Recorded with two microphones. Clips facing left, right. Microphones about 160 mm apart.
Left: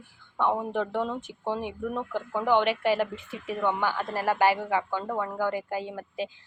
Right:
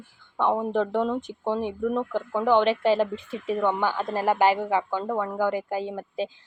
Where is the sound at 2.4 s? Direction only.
10° left (ahead or behind).